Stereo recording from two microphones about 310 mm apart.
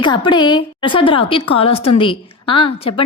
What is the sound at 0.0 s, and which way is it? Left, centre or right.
A woman's voice, centre.